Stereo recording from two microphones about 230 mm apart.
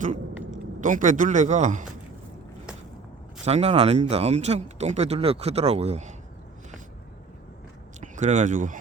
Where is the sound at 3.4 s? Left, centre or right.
Right.